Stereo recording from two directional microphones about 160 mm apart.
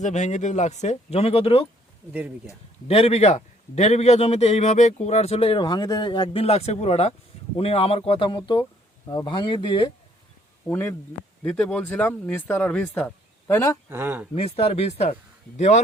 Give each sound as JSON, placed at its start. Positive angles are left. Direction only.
{"t": 0.0, "sound": "speech", "side_deg": 45}
{"t": 2.8, "sound": "a man's voice", "side_deg": 40}
{"t": 10.7, "sound": "speech", "side_deg": 15}
{"t": 13.9, "sound": "speech", "side_deg": -10}
{"t": 14.3, "sound": "a man's voice", "side_deg": 40}